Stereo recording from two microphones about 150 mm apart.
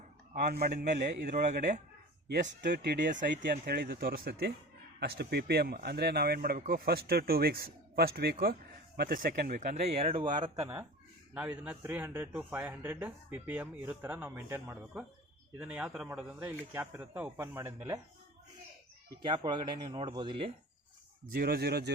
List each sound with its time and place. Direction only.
0.3 s a man's voice: 90° right
0.9 s a man's voice: 75° right (ahead or behind); by 8.5 s 90° right
9.0 s speech: 75° right (ahead or behind); by 10.0 s 55° right (ahead or behind)
10.0 s speech: 40° right (ahead or behind)
11.3 s speech: 10° right (ahead or behind)
19.2 s speech: 30° right (ahead or behind)
21.2 s a man's voice: 85° right